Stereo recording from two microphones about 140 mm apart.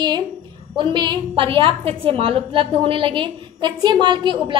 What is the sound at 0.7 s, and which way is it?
A woman's voice, 30° right (ahead or behind).